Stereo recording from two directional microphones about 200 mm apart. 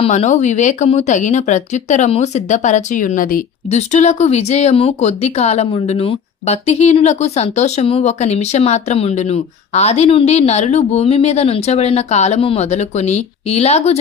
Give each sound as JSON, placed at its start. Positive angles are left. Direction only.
{"t": 0.0, "sound": "speech", "side_deg": 35}